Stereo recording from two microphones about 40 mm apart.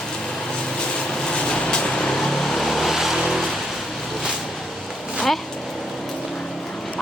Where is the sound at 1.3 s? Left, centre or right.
Left; by 3.6 s centre.